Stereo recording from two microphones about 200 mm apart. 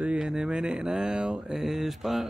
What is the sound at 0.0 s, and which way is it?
Mantra, 5° right (ahead or behind).